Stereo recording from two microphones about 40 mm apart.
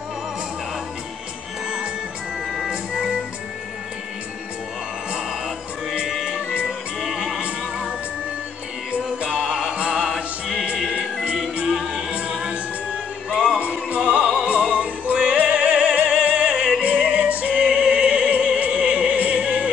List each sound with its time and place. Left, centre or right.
2.7 s organ: right
6.0 s music: centre
8.9 s music: right
11.6 s music: centre
12.3 s music: right
13.6 s music: right
14.3 s opera: right
15.1 s music: right
17.6 s music: right